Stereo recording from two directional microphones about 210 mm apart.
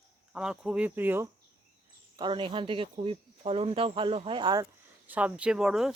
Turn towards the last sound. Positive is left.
turn(degrees=0)  # may be behind; listen again after turning